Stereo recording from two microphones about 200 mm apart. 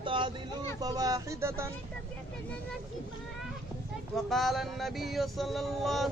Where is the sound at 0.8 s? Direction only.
20° right (ahead or behind).